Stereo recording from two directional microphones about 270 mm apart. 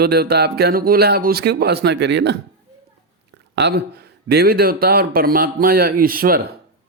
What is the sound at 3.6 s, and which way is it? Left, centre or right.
A man's voice, right.